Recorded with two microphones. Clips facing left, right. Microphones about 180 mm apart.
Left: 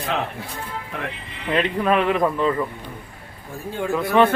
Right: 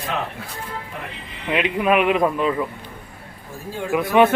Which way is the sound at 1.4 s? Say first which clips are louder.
Right 1 dB; 10° right (ahead or behind).